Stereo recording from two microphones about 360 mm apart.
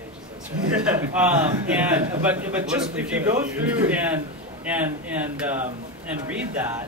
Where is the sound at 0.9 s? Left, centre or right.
Centre.